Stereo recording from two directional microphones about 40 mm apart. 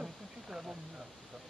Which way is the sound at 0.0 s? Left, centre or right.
Centre.